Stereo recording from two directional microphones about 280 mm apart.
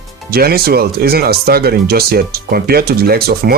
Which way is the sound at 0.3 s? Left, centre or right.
Right.